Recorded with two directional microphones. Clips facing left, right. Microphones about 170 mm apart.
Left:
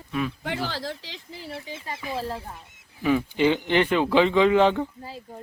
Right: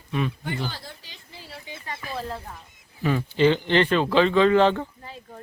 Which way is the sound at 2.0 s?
15° left (ahead or behind).